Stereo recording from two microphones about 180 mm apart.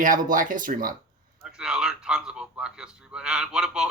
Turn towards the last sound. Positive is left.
turn(degrees=-5)  # may be behind; listen again after turning